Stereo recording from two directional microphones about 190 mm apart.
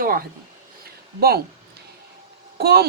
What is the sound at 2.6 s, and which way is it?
Speech, 55° right (ahead or behind).